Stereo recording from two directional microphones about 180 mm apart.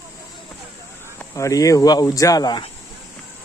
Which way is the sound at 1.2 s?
15° left (ahead or behind).